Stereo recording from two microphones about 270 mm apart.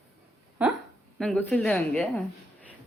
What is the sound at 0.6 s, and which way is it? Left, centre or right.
A woman's voice, centre.